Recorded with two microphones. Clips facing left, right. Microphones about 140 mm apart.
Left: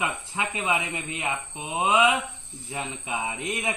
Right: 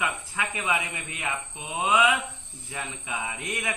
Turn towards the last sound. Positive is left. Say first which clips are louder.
# left 3 dB
turn(degrees=25)  # may be behind; listen again after turning